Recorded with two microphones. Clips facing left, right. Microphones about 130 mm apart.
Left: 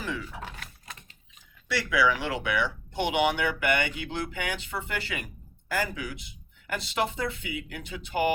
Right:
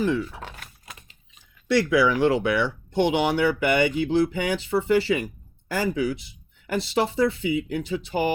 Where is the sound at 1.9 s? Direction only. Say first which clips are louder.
Right 4 dB; 35° right (ahead or behind).